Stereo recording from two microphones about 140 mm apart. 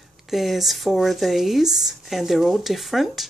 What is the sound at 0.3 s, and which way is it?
Speech, centre (ahead or behind).